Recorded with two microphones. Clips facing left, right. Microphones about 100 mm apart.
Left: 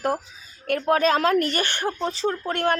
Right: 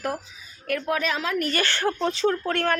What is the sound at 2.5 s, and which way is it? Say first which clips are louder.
Speech: left 1 dB; 15° left (ahead or behind).